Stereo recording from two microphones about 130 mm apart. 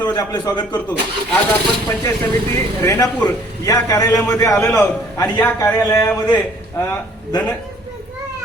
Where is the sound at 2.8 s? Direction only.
25° left (ahead or behind).